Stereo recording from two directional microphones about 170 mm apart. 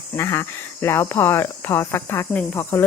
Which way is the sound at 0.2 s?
15° left (ahead or behind).